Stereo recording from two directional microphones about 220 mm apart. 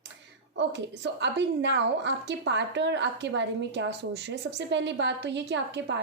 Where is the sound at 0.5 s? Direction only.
55° right (ahead or behind).